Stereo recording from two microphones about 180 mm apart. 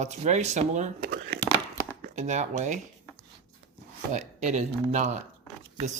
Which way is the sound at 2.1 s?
40° right (ahead or behind).